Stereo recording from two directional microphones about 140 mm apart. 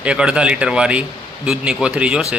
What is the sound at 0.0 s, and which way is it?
Speech, 10° right (ahead or behind).